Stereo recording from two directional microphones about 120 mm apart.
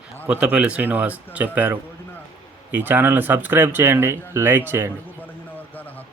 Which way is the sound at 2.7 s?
15° right (ahead or behind).